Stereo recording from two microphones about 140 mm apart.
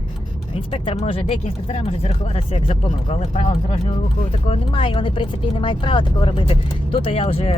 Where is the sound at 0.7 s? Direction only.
40° left (ahead or behind).